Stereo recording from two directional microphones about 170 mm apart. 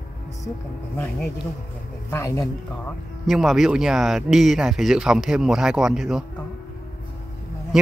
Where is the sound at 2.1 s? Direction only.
15° left (ahead or behind).